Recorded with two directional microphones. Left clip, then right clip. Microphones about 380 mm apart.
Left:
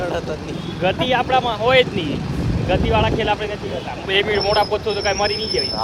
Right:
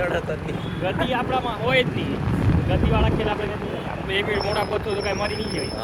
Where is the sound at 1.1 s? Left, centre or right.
Left.